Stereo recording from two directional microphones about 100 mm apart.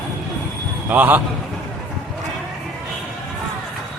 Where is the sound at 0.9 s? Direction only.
15° right (ahead or behind).